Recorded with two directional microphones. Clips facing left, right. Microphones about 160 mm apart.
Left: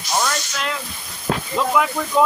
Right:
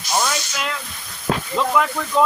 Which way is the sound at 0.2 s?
5° right (ahead or behind).